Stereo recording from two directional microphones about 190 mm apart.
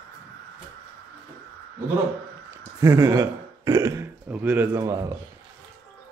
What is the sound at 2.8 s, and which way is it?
A man's voice, 15° right (ahead or behind).